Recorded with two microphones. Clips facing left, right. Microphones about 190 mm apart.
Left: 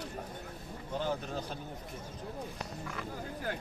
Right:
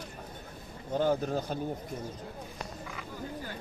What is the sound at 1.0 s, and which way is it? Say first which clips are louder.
Speech: right 8 dB; 40° right (ahead or behind).